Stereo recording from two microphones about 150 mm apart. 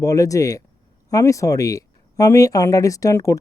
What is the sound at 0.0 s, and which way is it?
Speech, 20° left (ahead or behind).